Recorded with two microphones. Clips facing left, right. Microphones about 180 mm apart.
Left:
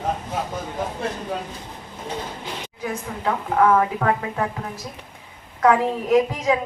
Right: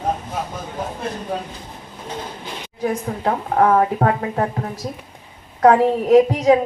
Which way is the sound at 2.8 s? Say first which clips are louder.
Right 5 dB; 40° right (ahead or behind).